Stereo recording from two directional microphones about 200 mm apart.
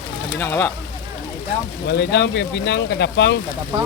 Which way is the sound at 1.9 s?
60° left (ahead or behind).